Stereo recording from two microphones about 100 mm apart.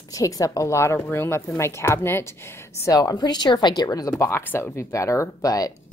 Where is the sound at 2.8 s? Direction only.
40° left (ahead or behind).